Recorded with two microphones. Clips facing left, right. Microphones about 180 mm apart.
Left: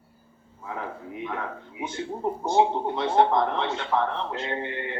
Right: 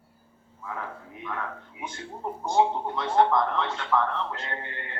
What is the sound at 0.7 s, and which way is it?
Speech, 20° left (ahead or behind).